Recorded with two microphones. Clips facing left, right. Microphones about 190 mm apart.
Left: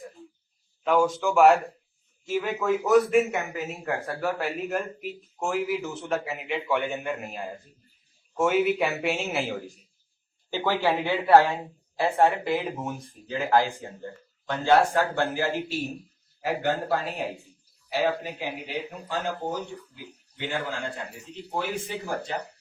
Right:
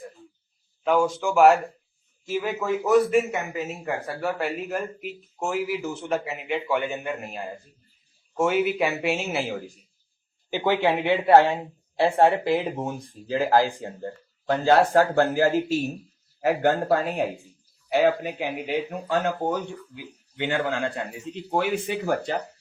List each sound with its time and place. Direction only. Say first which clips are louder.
0.9 s a man's voice: right 1 dB; centre (ahead or behind)
10.5 s speech: right 3 dB; 15° right (ahead or behind); by 15.8 s 45° right (ahead or behind)
17.8 s speech: right 5 dB; 60° right (ahead or behind)